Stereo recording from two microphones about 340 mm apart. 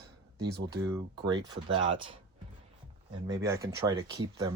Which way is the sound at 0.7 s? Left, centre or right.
Centre.